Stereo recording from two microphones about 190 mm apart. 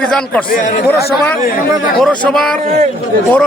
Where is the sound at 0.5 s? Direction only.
40° left (ahead or behind).